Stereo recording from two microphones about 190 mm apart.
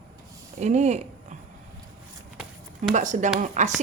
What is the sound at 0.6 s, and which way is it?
Speech, 35° right (ahead or behind).